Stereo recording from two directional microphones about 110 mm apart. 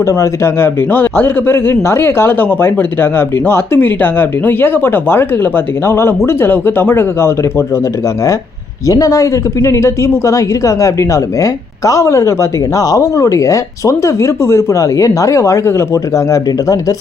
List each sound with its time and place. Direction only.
0.0 s speech: 30° left (ahead or behind)
8.9 s speech: 30° left (ahead or behind)